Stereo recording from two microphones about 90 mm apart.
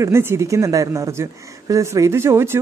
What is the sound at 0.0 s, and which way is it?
A woman's voice, 30° right (ahead or behind).